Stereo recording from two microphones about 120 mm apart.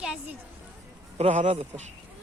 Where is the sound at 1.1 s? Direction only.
75° right (ahead or behind).